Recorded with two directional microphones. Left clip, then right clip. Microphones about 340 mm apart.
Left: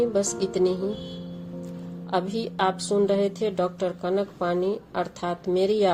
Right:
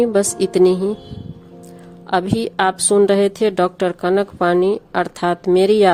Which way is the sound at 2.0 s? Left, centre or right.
Right.